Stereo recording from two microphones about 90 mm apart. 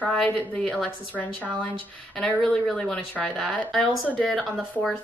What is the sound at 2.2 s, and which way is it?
A woman's voice, 5° left (ahead or behind).